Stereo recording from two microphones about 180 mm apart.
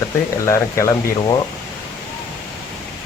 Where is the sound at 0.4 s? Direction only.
15° left (ahead or behind).